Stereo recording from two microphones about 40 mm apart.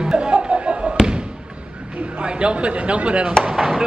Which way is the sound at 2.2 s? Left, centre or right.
Right.